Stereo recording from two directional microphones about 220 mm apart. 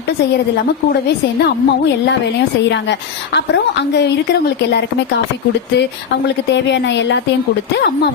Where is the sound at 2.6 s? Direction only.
55° left (ahead or behind).